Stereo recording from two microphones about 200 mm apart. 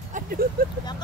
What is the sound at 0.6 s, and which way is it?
Vehicle, 45° right (ahead or behind).